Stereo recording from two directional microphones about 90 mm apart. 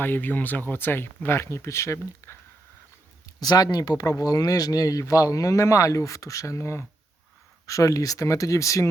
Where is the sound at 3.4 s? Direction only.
45° left (ahead or behind).